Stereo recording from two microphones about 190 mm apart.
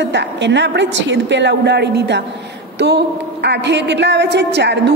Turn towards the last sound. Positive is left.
turn(degrees=-65)  # may be behind; listen again after turning